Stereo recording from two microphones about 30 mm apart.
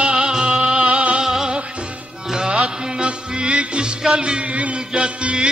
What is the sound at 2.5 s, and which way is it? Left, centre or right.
Music, right.